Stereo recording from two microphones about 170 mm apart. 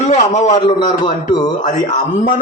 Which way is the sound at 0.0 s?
45° left (ahead or behind).